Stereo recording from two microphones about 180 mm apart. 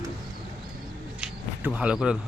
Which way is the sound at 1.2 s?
10° right (ahead or behind).